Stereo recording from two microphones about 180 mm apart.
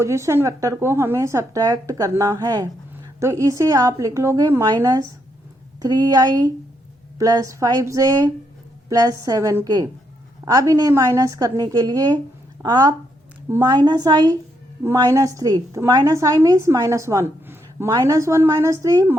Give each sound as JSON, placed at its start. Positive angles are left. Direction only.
{"t": 0.0, "sound": "a woman's voice", "side_deg": -15}